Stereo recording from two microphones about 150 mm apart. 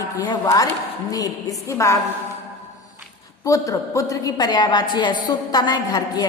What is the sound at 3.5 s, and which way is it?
A woman's voice, 20° left (ahead or behind).